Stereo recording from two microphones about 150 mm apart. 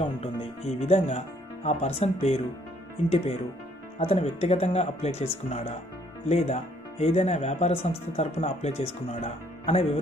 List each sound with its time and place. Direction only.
0.0 s speech: 40° left (ahead or behind)
4.0 s speech: 45° left (ahead or behind)